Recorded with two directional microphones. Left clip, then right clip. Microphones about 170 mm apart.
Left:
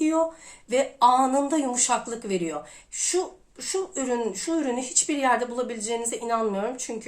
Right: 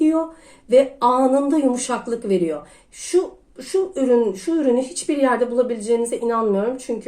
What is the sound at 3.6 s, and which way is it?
Speech, 20° left (ahead or behind).